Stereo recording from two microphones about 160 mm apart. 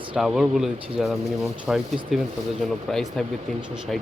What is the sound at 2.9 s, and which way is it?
Speech, centre (ahead or behind).